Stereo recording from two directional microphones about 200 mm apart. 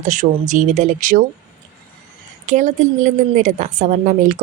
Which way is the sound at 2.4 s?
40° right (ahead or behind).